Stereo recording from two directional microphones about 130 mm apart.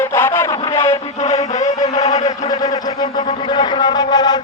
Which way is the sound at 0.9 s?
50° left (ahead or behind).